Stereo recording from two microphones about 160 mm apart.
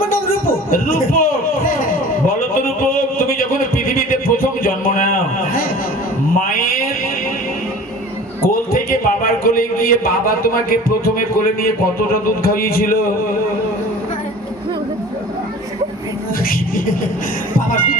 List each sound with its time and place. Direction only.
0.1 s a sound: 65° left (ahead or behind)
8.4 s a man's voice: 65° left (ahead or behind)
16.4 s music: 65° left (ahead or behind)